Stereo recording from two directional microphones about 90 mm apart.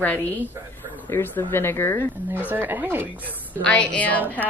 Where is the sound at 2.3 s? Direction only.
20° right (ahead or behind).